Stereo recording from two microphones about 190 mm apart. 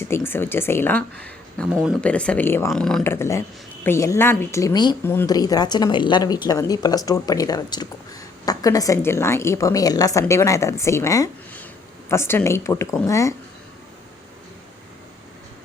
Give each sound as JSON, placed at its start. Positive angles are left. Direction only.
{"t": 0.1, "sound": "speech", "side_deg": 10}
{"t": 1.7, "sound": "speech", "side_deg": -5}
{"t": 2.0, "sound": "a woman's voice", "side_deg": 5}